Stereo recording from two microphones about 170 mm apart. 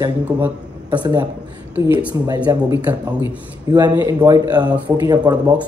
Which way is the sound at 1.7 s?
10° right (ahead or behind).